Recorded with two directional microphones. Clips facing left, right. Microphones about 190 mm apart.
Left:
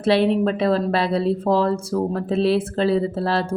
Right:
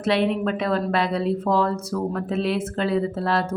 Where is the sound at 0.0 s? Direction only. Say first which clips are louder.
Left 4 dB; 35° left (ahead or behind).